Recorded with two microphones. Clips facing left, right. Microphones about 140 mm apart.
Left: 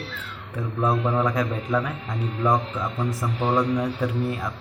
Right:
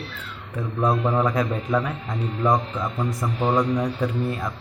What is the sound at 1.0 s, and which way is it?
Speech, 15° right (ahead or behind).